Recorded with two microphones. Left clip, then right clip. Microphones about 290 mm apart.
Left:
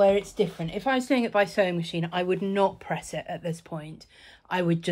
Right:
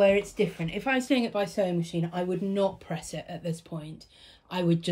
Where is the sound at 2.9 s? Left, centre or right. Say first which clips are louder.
Left 6 dB; left.